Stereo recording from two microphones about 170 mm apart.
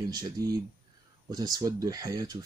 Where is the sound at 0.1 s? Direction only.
20° right (ahead or behind).